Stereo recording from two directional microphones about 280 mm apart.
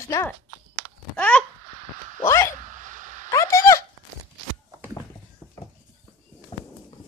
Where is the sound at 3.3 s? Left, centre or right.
Centre.